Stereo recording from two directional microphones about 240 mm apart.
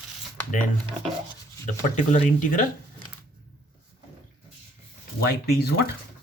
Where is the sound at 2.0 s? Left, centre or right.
Left.